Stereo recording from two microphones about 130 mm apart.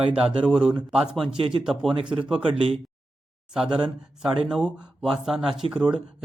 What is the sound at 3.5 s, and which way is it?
Speech, 5° right (ahead or behind).